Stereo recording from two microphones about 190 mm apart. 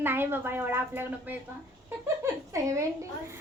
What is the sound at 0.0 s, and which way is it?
A woman's voice, 10° right (ahead or behind).